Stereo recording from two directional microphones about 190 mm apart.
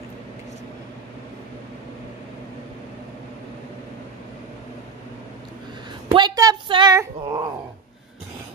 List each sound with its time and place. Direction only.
6.1 s a woman's voice: 20° right (ahead or behind)
7.0 s dog: 25° right (ahead or behind)